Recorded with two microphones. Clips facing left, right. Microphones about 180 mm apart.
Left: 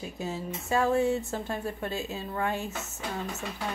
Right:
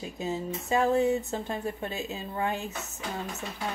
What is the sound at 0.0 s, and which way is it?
Speech, 20° right (ahead or behind).